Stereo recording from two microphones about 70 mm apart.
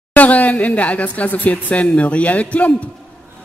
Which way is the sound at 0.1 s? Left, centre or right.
Left.